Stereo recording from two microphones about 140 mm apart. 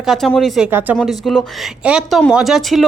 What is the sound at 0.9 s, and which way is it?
A woman's voice, centre (ahead or behind).